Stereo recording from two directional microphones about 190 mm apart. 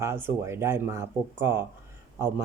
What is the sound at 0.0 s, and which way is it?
Speech, 15° right (ahead or behind).